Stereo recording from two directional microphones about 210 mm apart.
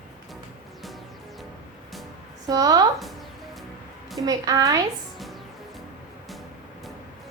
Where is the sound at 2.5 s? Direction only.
15° right (ahead or behind).